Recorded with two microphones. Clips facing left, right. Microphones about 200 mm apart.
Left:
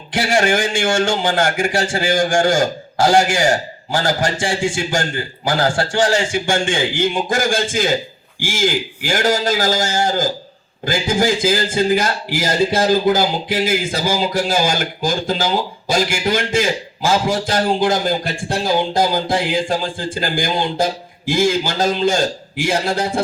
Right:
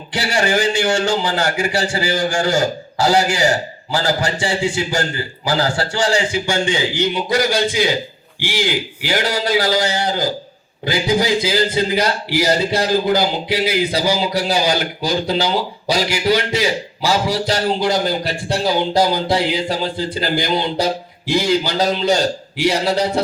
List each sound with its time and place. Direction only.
0.1 s a man's voice: 50° left (ahead or behind)